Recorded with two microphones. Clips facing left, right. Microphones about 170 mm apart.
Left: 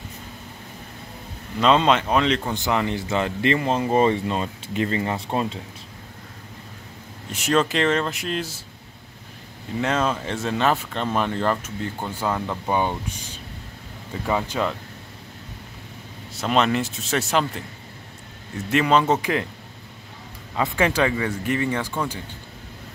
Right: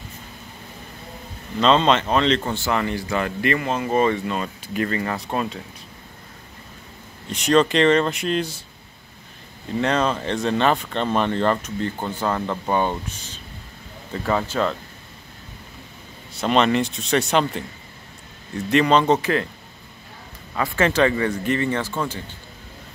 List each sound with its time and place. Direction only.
1.6 s speech: 10° left (ahead or behind); by 5.6 s 25° left (ahead or behind)
7.2 s speech: 5° left (ahead or behind)
9.8 s speech: 5° left (ahead or behind)
16.3 s speech: 5° left (ahead or behind)
18.7 s speech: 5° left (ahead or behind)
20.5 s speech: 15° left (ahead or behind)